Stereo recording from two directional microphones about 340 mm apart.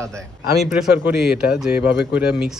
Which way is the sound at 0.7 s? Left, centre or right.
Centre.